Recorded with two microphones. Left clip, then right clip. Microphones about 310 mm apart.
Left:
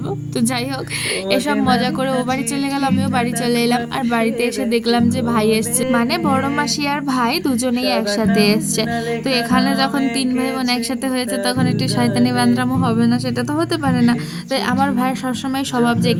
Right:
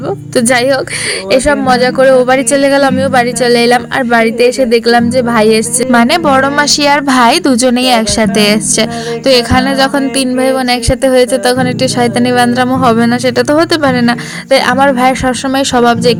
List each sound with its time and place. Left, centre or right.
0.3 s a woman's voice: left